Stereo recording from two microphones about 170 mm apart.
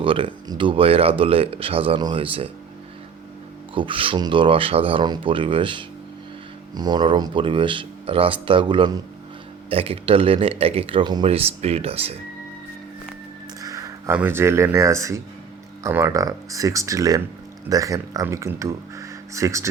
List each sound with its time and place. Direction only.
0.0 s speech: 30° right (ahead or behind)
3.8 s speech: 30° right (ahead or behind)
13.6 s a sound: 20° right (ahead or behind)
14.2 s speech: 10° right (ahead or behind)